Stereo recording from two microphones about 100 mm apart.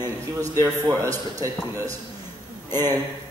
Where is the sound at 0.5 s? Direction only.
35° right (ahead or behind).